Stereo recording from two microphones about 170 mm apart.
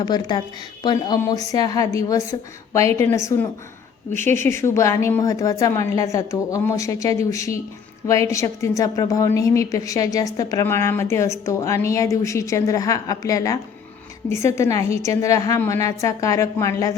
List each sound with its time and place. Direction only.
0.0 s a woman's voice: 25° left (ahead or behind)